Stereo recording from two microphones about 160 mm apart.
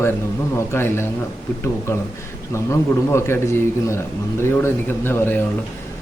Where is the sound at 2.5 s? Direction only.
15° left (ahead or behind).